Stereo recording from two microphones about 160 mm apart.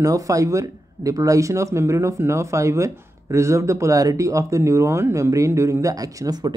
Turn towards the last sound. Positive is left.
turn(degrees=-25)  # may be behind; listen again after turning